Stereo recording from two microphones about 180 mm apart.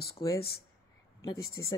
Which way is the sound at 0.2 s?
20° left (ahead or behind).